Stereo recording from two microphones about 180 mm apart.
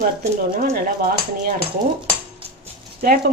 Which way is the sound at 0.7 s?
55° right (ahead or behind).